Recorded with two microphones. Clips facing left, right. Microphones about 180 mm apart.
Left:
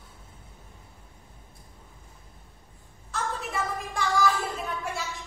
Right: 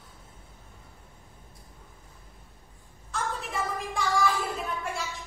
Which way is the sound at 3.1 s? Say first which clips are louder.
Left 1 dB; centre (ahead or behind).